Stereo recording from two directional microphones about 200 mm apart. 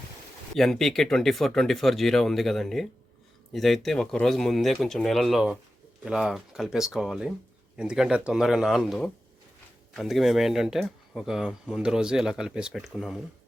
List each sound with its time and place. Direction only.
0.5 s speech: centre (ahead or behind)